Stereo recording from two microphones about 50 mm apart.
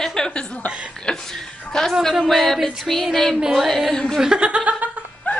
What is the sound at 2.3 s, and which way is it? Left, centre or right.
A woman's voice, centre.